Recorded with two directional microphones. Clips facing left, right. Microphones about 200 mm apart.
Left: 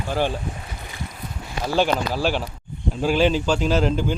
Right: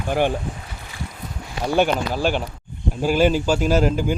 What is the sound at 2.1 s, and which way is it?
A man's voice, centre (ahead or behind).